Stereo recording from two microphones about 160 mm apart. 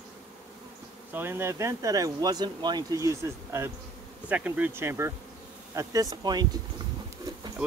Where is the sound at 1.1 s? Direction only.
15° right (ahead or behind).